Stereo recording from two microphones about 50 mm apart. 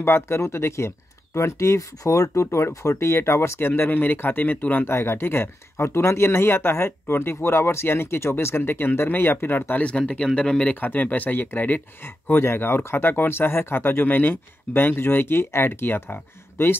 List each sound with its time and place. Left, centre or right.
0.0 s speech: left
0.4 s speech: left
4.8 s speech: left
9.6 s speech: left
9.8 s speech: left
10.7 s speech: left